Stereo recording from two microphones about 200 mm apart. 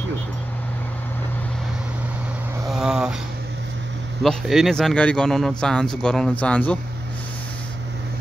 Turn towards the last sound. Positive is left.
turn(degrees=5)  # may be behind; listen again after turning